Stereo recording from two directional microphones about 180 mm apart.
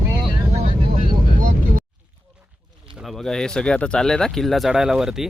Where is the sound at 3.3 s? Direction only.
5° left (ahead or behind).